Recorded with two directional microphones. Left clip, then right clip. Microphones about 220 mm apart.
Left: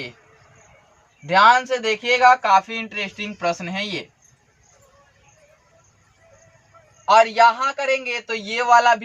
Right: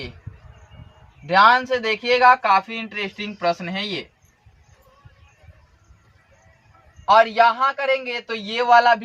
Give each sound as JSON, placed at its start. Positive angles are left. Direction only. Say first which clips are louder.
{"t": 1.3, "sound": "speech", "louder": "even", "side_deg": 15}
{"t": 7.1, "sound": "speech", "louder": "left 1 dB", "side_deg": 20}